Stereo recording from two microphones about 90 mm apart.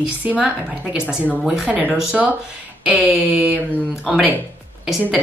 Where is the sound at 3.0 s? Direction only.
15° right (ahead or behind).